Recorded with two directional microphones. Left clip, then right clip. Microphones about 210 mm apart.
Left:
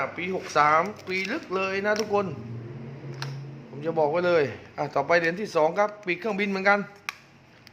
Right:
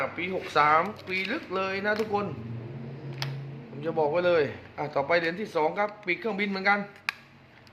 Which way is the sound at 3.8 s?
15° left (ahead or behind).